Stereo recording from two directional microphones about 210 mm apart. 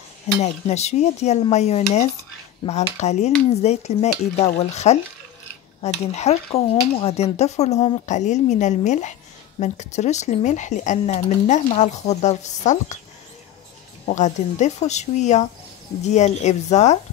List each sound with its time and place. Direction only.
0.4 s speech: 30° left (ahead or behind)
14.0 s speech: 35° left (ahead or behind)